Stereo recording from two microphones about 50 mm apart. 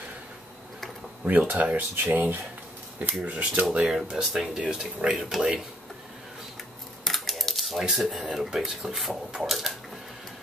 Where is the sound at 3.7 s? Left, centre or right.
Centre.